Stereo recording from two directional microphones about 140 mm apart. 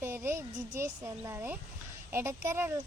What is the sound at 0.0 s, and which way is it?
Speech, 20° right (ahead or behind).